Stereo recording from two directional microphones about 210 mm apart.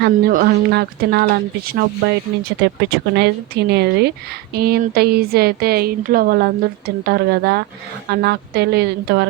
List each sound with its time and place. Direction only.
0.0 s speech: 45° right (ahead or behind)